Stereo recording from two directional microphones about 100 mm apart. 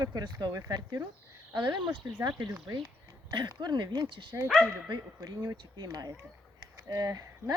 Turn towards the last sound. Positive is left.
turn(degrees=-40)  # may be behind; listen again after turning